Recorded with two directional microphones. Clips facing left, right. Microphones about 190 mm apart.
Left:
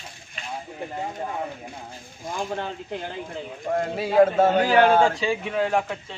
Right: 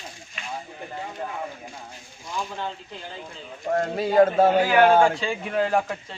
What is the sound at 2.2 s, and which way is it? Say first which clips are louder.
Speech: left 2 dB; 55° left (ahead or behind).